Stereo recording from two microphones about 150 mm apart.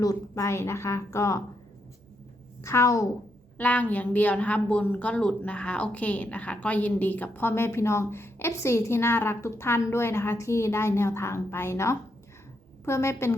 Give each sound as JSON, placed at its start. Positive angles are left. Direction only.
{"t": 0.0, "sound": "a woman's voice", "side_deg": 20}
{"t": 2.6, "sound": "a woman's voice", "side_deg": 20}
{"t": 3.6, "sound": "a woman's voice", "side_deg": 10}